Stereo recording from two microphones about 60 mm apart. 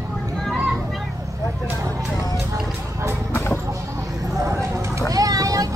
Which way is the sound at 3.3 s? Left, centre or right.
Left.